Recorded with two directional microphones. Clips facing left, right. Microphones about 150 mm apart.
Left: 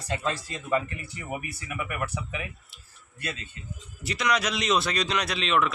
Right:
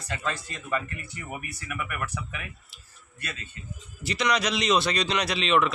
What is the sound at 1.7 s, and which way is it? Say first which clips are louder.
Speech: left 1 dB; 25° left (ahead or behind).